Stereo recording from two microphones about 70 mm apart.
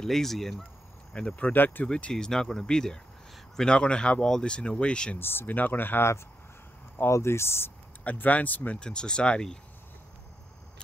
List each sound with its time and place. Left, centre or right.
0.0 s speech: centre
1.1 s speech: centre
1.9 s speech: centre
5.2 s speech: left
8.0 s speech: left